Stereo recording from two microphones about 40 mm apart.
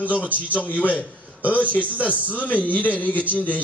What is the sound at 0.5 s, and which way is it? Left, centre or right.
A man's voice, left.